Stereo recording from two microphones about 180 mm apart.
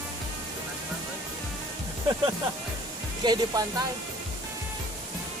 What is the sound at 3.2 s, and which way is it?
Speech, 25° right (ahead or behind).